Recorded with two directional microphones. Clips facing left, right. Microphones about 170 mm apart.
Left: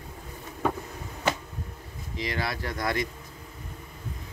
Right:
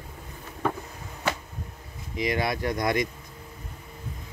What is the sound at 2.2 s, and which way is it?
Speech, 15° right (ahead or behind).